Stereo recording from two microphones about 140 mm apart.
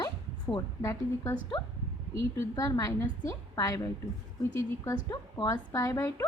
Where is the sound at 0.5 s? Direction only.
20° left (ahead or behind).